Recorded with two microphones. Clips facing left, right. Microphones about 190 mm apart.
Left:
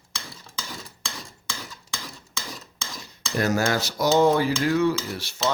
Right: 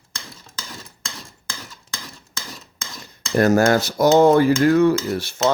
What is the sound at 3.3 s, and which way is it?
Speech, 50° right (ahead or behind).